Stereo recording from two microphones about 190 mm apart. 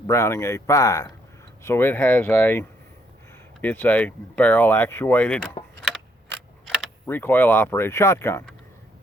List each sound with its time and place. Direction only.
0.1 s speech: 15° left (ahead or behind)
7.1 s speech: 10° left (ahead or behind)